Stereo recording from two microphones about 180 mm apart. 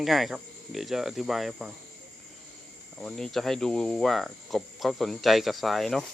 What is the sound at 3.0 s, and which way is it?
Speech, centre (ahead or behind).